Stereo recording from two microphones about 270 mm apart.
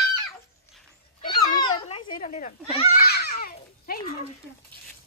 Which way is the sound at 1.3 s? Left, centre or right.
Centre.